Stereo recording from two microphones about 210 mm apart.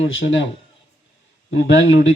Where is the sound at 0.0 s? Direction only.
65° left (ahead or behind).